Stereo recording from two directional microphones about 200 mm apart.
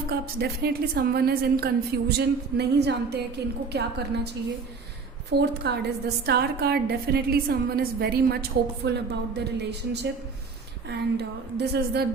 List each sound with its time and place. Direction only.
0.1 s a woman's voice: 50° right (ahead or behind)
5.3 s a woman's voice: 55° right (ahead or behind)